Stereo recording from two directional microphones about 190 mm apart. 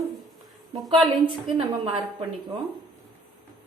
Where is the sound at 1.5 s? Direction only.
25° right (ahead or behind).